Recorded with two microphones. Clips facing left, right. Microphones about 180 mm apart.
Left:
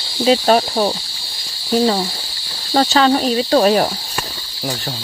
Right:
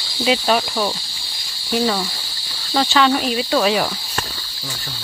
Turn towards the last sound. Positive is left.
turn(degrees=40)  # may be behind; listen again after turning